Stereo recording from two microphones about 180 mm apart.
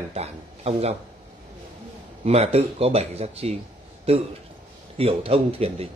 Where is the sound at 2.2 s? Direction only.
35° right (ahead or behind).